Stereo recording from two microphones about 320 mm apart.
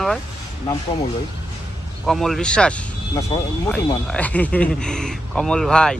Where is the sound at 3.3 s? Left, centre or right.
Centre.